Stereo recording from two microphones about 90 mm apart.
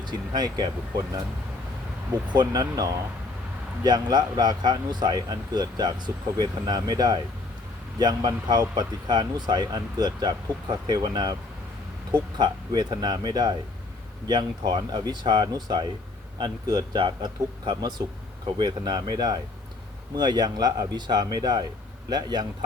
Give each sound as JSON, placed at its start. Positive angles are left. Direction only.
{"t": 0.0, "sound": "speech", "side_deg": -50}
{"t": 2.3, "sound": "speech", "side_deg": -50}
{"t": 12.4, "sound": "speech", "side_deg": -50}